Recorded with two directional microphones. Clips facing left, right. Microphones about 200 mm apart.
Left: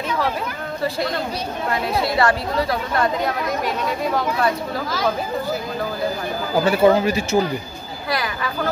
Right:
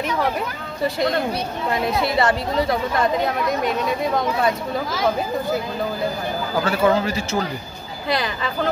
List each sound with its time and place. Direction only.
2.1 s a woman's voice: 25° right (ahead or behind)
6.6 s speech: 15° left (ahead or behind)
8.1 s speech: 20° right (ahead or behind)